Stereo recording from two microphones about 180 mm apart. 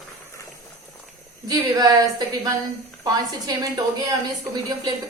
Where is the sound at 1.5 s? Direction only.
20° right (ahead or behind).